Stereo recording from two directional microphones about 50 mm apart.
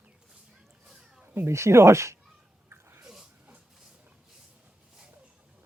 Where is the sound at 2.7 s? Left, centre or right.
Right.